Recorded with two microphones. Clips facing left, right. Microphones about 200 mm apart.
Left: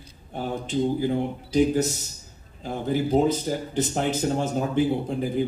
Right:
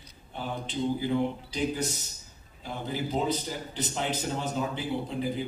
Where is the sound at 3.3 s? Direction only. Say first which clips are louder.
Left 7 dB; 45° left (ahead or behind).